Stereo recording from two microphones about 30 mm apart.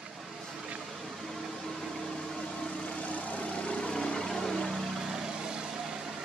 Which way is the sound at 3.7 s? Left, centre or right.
Left.